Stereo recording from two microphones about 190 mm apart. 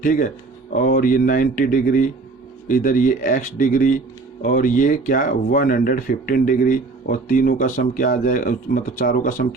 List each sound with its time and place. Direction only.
0.0 s speech: 45° left (ahead or behind)